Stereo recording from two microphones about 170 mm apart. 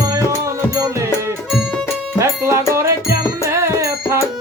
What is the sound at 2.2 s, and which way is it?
Music, 15° right (ahead or behind).